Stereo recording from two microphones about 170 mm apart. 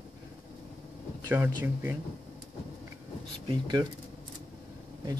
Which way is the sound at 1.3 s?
10° right (ahead or behind).